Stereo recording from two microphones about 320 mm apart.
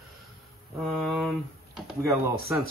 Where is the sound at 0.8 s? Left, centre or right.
Centre.